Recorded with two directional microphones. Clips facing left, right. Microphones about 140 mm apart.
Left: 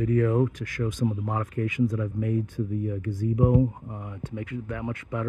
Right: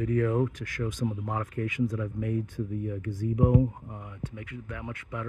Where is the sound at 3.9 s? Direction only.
55° left (ahead or behind).